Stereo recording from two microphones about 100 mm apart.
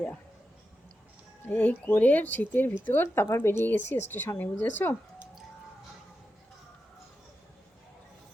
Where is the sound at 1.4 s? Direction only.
20° left (ahead or behind).